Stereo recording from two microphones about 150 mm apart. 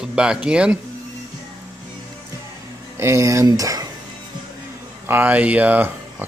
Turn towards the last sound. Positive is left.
turn(degrees=-10)  # may be behind; listen again after turning